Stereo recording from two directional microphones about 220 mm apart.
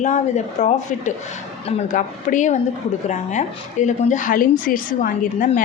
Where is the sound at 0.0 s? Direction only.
35° left (ahead or behind).